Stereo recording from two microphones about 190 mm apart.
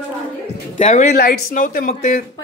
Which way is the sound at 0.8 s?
40° left (ahead or behind).